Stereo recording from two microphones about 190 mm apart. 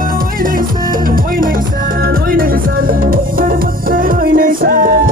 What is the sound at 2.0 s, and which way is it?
Music, 50° right (ahead or behind).